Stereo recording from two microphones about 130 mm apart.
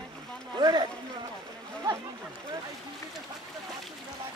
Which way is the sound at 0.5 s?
35° right (ahead or behind).